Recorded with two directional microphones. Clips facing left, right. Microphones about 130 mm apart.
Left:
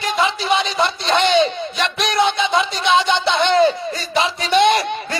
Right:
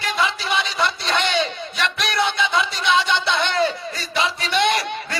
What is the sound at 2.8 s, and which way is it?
Music, 25° left (ahead or behind).